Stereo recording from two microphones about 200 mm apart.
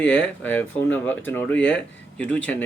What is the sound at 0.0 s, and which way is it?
Speech, 10° left (ahead or behind).